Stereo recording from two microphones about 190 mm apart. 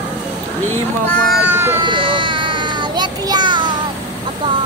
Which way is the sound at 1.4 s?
10° right (ahead or behind).